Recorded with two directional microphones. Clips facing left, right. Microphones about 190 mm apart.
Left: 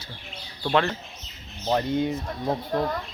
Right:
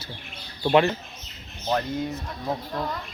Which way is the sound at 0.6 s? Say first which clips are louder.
Right 4 dB; 10° right (ahead or behind).